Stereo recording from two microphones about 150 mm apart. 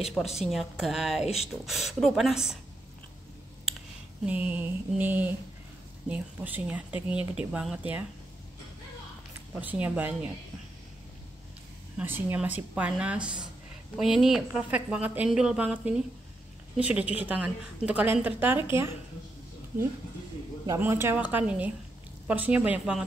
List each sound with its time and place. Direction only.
0.4 s a woman's voice: centre (ahead or behind)
1.2 s speech: 45° left (ahead or behind)
1.7 s a woman's voice: centre (ahead or behind)
4.3 s a woman's voice: 10° right (ahead or behind)
9.5 s a woman's voice: 10° right (ahead or behind)
12.0 s a woman's voice: 15° right (ahead or behind)
20.6 s a woman's voice: 20° right (ahead or behind)